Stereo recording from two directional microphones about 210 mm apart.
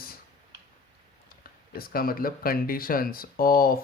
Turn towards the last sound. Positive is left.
turn(degrees=45)  # may be behind; listen again after turning